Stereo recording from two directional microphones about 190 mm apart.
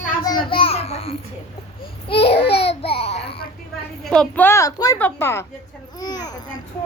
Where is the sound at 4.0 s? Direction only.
5° left (ahead or behind).